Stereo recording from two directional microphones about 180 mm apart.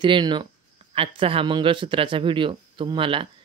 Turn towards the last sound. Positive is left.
turn(degrees=-30)  # may be behind; listen again after turning